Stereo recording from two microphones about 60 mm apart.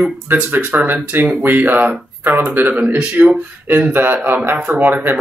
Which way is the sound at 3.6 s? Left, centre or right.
Right.